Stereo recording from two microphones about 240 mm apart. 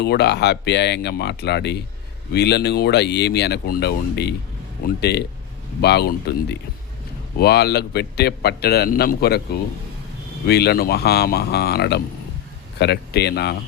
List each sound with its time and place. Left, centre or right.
0.0 s a man's voice: left
10.4 s a man's voice: left